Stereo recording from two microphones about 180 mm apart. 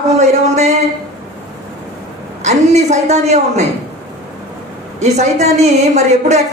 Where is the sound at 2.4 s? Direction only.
40° right (ahead or behind).